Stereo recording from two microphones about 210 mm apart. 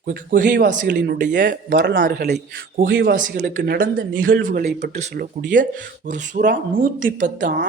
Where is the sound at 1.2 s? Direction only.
40° right (ahead or behind).